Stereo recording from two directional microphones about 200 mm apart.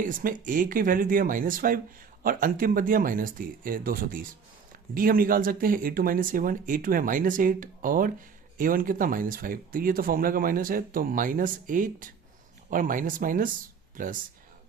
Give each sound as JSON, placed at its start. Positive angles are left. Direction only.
{"t": 0.0, "sound": "speech", "side_deg": -45}